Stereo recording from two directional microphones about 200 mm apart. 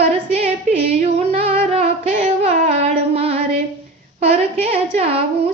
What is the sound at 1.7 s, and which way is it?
Singing, 35° right (ahead or behind).